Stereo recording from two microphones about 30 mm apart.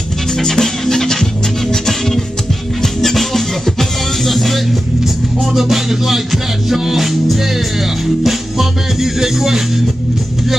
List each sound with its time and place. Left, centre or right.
0.4 s music: centre
5.5 s music: centre